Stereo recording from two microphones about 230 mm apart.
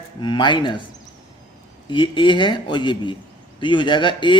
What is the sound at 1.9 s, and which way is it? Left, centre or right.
A man's voice, left.